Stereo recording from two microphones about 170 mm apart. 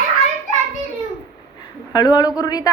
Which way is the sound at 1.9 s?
25° left (ahead or behind).